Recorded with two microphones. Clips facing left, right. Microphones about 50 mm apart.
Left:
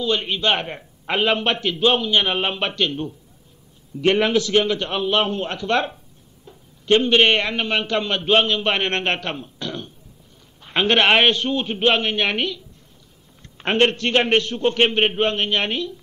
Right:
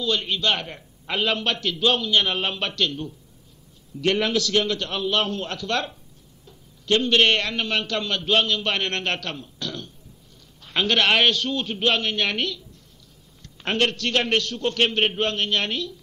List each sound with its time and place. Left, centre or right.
0.0 s a man's voice: left